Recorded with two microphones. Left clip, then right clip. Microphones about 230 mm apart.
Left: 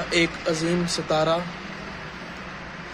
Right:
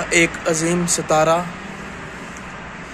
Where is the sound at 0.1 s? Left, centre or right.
Centre.